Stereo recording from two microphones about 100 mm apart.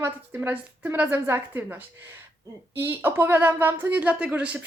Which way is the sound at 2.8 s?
20° right (ahead or behind).